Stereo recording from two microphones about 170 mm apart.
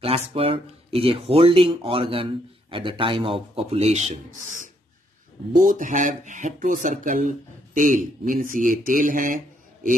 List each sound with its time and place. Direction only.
0.0 s speech: 35° right (ahead or behind); by 9.4 s 50° right (ahead or behind)